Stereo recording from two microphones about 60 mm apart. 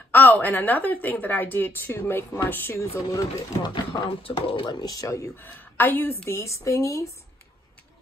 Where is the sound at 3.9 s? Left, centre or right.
Left.